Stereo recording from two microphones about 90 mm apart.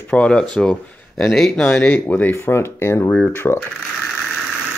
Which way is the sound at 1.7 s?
20° left (ahead or behind).